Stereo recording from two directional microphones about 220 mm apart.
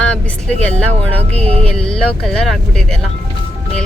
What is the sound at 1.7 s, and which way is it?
Speech, centre (ahead or behind).